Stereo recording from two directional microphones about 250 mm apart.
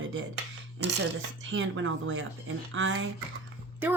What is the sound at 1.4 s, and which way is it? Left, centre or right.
Speech, right.